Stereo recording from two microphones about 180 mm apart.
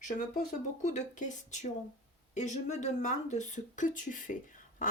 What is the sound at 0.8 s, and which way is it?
Speech, 45° left (ahead or behind).